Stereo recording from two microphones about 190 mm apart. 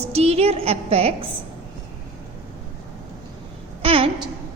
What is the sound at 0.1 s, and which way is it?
A woman's voice, 35° right (ahead or behind).